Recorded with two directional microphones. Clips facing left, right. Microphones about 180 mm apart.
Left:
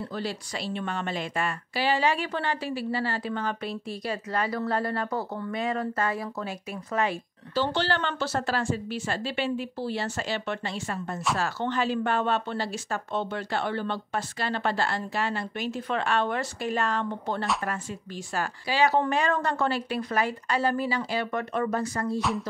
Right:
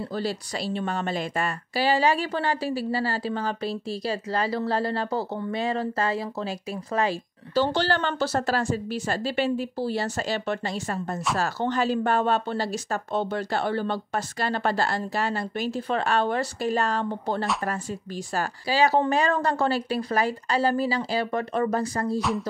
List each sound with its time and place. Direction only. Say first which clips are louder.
0.1 s a woman's voice: right 4 dB; 35° right (ahead or behind)